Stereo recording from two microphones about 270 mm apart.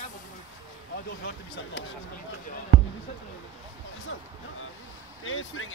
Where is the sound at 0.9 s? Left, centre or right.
Left.